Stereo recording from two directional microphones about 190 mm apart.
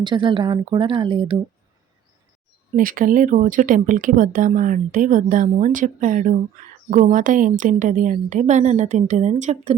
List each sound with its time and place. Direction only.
0.0 s a woman's voice: 25° right (ahead or behind)
2.7 s a woman's voice: 45° right (ahead or behind)